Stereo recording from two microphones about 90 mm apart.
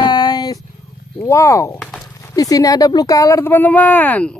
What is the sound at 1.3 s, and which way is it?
Speech, 35° left (ahead or behind).